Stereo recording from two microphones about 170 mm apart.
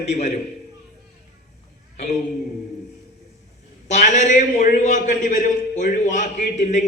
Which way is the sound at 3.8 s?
45° left (ahead or behind).